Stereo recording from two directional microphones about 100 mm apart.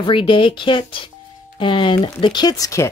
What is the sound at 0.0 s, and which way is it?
Speech, 60° left (ahead or behind).